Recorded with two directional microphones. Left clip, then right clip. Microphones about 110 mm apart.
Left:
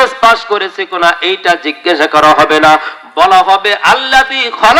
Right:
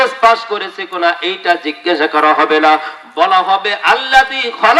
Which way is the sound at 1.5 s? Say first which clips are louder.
Left 2 dB; 25° left (ahead or behind).